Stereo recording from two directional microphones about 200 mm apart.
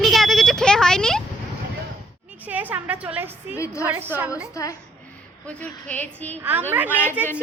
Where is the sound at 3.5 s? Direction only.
15° left (ahead or behind).